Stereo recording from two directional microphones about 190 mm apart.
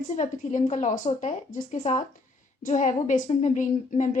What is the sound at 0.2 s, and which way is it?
A woman's voice, 40° left (ahead or behind).